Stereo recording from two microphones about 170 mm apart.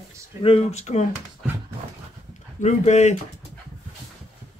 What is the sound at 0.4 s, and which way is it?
Speech, 35° left (ahead or behind).